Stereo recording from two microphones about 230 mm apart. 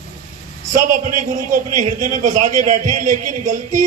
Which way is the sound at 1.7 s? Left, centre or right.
Right.